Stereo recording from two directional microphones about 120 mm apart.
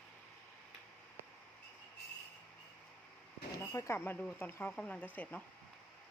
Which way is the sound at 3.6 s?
25° left (ahead or behind).